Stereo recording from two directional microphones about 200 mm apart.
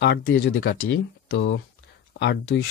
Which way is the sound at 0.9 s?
70° left (ahead or behind).